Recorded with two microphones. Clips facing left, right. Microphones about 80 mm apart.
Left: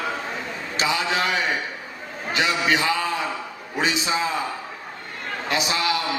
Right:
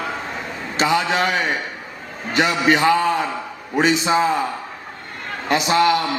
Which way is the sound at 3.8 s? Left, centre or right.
Right.